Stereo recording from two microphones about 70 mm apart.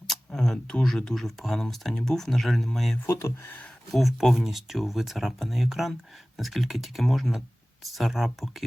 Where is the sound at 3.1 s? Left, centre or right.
Left.